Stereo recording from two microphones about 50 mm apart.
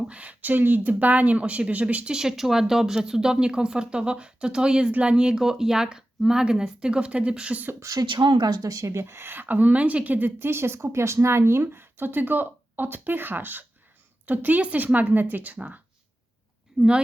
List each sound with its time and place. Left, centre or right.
0.1 s speech: right
2.0 s speech: centre
4.9 s speech: right
5.1 s speech: centre
7.9 s speech: right
8.7 s a woman's voice: right
10.5 s a woman's voice: right